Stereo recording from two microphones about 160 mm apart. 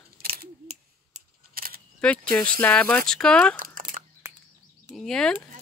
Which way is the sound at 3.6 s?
60° right (ahead or behind).